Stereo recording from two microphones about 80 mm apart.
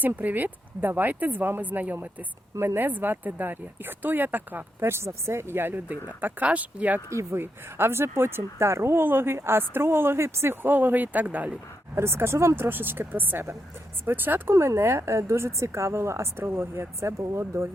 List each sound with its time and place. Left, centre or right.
0.0 s speech: right
7.1 s speech: right; by 11.6 s centre
11.9 s speech: right